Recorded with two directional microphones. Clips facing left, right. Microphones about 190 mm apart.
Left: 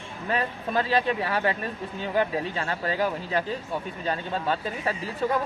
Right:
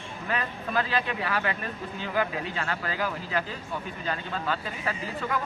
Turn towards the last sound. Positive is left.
turn(degrees=30)  # may be behind; listen again after turning